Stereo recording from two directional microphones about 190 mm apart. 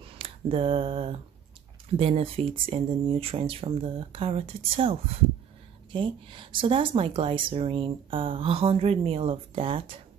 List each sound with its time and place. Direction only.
0.0 s speech: 30° right (ahead or behind)
5.9 s speech: 25° right (ahead or behind)